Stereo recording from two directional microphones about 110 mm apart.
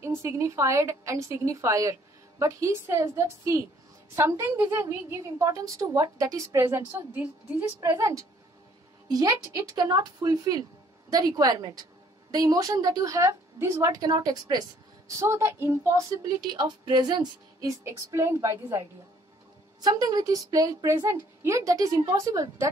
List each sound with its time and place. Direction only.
0.0 s a woman's voice: 25° right (ahead or behind)
16.3 s speech: 40° right (ahead or behind)